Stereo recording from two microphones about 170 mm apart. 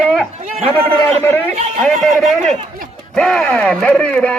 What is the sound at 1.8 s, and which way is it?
A man's voice, centre (ahead or behind).